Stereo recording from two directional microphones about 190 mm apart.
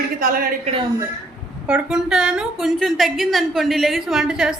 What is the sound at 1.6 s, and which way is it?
A man's voice, 5° right (ahead or behind).